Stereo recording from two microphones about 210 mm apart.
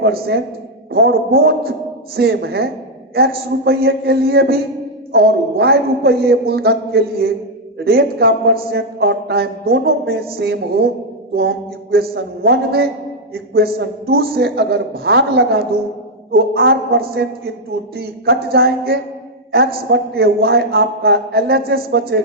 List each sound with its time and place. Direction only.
0.0 s a man's voice: 50° right (ahead or behind)